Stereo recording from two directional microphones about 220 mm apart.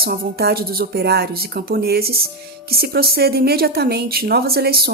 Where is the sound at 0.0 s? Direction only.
45° right (ahead or behind).